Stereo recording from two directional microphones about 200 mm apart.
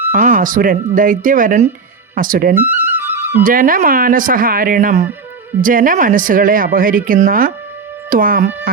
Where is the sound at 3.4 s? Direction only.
45° right (ahead or behind).